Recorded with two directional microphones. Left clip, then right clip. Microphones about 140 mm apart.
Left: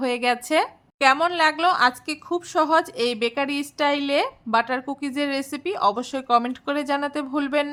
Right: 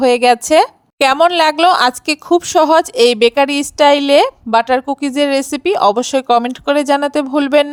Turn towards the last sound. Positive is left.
turn(degrees=-55)  # may be behind; listen again after turning